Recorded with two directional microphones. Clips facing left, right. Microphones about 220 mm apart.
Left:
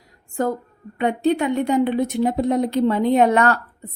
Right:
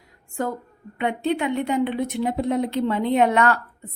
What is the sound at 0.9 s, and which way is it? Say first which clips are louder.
A woman's voice: left 4 dB; 40° left (ahead or behind).